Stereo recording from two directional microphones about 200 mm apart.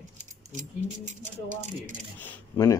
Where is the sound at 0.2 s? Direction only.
35° right (ahead or behind).